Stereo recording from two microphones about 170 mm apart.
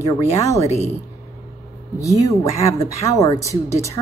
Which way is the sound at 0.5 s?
40° left (ahead or behind).